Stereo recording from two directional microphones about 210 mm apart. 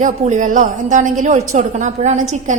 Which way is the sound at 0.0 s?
35° right (ahead or behind).